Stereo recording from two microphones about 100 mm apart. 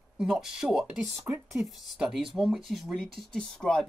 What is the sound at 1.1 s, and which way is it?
Speech, 25° right (ahead or behind).